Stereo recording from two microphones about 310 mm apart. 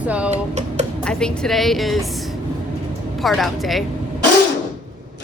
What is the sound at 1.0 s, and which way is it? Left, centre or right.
A woman's voice, centre.